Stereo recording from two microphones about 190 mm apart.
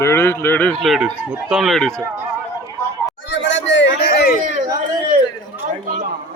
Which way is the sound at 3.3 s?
70° left (ahead or behind).